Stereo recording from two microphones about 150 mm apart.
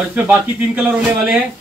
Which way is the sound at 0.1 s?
10° right (ahead or behind).